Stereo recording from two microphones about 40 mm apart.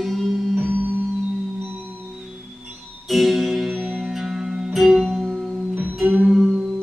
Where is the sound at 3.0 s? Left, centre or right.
Centre.